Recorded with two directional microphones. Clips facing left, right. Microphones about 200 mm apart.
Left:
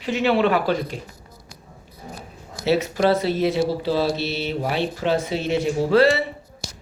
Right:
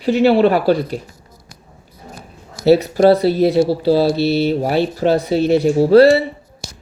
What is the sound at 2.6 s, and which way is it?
Speech, 35° right (ahead or behind).